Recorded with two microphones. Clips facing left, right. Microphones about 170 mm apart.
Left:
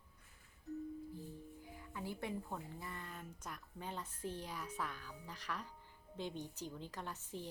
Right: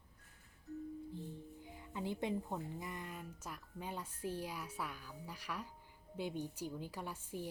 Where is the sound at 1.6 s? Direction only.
20° right (ahead or behind).